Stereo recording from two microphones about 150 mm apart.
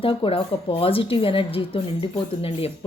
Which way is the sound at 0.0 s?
35° left (ahead or behind).